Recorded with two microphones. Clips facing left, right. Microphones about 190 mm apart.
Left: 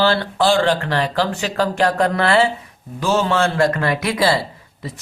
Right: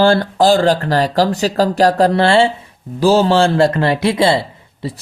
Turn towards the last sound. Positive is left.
turn(degrees=-30)  # may be behind; listen again after turning